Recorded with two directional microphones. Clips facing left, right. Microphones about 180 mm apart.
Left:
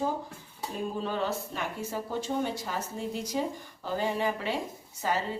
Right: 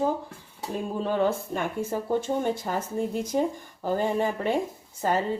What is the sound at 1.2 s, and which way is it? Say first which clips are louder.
A woman's voice: right 7 dB; 50° right (ahead or behind).